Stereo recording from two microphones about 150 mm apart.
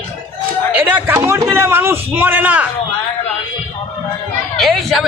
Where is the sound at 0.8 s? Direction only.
10° right (ahead or behind).